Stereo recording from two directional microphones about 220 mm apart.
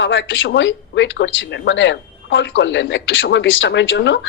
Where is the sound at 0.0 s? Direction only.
55° left (ahead or behind).